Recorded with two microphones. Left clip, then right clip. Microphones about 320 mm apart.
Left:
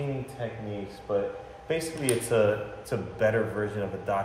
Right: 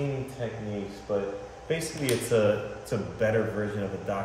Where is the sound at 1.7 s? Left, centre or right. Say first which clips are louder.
Left 1 dB; centre.